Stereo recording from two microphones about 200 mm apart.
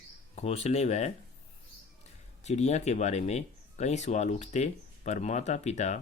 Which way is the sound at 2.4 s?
35° left (ahead or behind).